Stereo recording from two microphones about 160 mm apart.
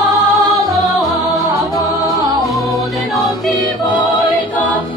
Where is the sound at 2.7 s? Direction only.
Centre (ahead or behind).